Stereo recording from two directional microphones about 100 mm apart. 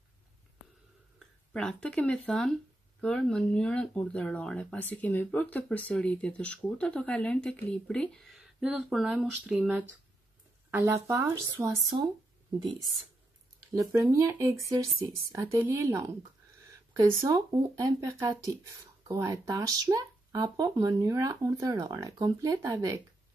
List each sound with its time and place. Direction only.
1.5 s speech: 5° left (ahead or behind)
9.5 s speech: 15° right (ahead or behind)
10.7 s speech: 30° right (ahead or behind)
11.6 s speech: 20° right (ahead or behind)
13.7 s speech: 30° right (ahead or behind)
17.3 s speech: 45° right (ahead or behind)
18.3 s speech: 35° right (ahead or behind)